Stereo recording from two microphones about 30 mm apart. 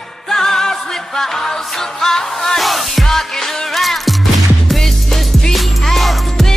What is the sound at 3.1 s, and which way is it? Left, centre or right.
Music, centre.